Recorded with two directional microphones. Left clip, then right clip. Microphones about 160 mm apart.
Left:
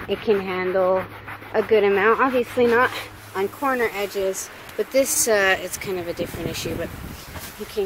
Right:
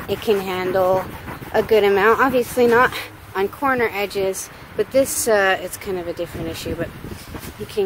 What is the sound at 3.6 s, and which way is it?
Speech, 10° right (ahead or behind).